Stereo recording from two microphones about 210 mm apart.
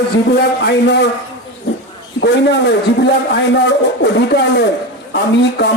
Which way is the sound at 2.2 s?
55° left (ahead or behind).